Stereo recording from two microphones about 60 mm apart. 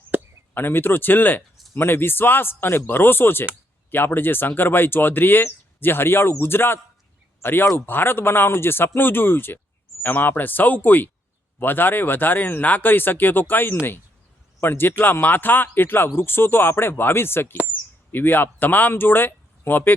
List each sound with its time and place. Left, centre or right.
0.5 s speech: left